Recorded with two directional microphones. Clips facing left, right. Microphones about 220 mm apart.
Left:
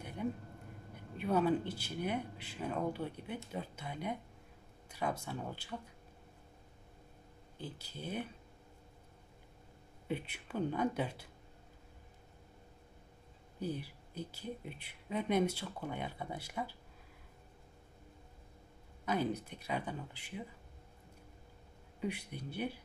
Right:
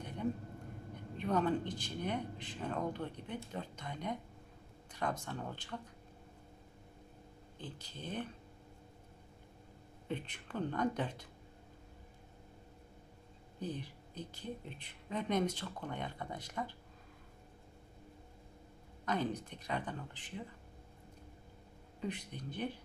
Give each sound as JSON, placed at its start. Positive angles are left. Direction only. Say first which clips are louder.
{"t": 1.1, "sound": "speech", "louder": "left 2 dB", "side_deg": 10}
{"t": 7.5, "sound": "speech", "louder": "left 2 dB", "side_deg": 10}
{"t": 10.0, "sound": "speech", "louder": "left 2 dB", "side_deg": 10}
{"t": 13.6, "sound": "speech", "louder": "left 2 dB", "side_deg": 10}
{"t": 19.0, "sound": "speech", "louder": "left 1 dB", "side_deg": 10}
{"t": 22.0, "sound": "speech", "louder": "left 2 dB", "side_deg": 10}